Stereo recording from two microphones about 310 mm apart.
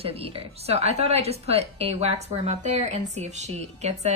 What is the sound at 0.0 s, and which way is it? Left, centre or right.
A woman's voice, centre.